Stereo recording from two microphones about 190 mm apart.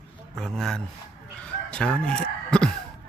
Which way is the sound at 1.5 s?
5° left (ahead or behind).